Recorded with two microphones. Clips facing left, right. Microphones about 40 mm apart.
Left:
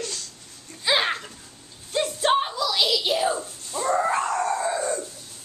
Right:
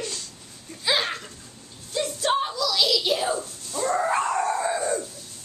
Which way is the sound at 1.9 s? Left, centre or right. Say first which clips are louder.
Left 3 dB; left.